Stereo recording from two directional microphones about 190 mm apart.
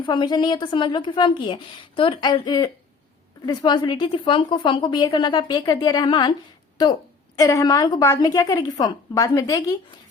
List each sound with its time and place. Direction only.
0.0 s a woman's voice: 25° left (ahead or behind)
7.3 s a woman's voice: 20° left (ahead or behind)